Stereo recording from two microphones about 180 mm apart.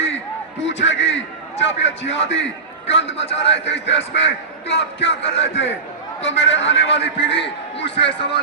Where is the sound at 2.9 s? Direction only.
35° left (ahead or behind).